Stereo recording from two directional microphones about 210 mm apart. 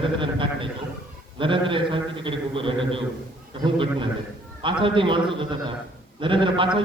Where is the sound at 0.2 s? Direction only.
25° right (ahead or behind).